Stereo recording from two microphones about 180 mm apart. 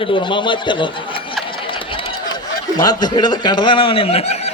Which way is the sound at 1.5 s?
30° left (ahead or behind).